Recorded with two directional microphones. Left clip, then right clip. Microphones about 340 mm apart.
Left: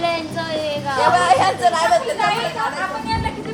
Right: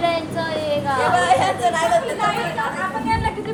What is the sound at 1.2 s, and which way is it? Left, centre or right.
Chatter, centre.